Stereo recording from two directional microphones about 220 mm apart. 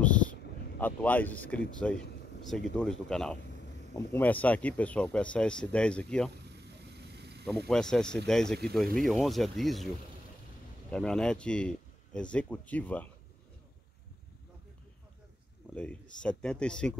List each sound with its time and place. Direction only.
0.0 s a sound: 5° left (ahead or behind)
0.7 s a man's voice: 5° left (ahead or behind)
1.8 s a sound: 5° left (ahead or behind)
2.8 s speech: centre (ahead or behind)
6.5 s vehicle: 50° right (ahead or behind)
7.4 s speech: centre (ahead or behind)
10.9 s speech: 5° left (ahead or behind)
15.7 s speech: 5° left (ahead or behind)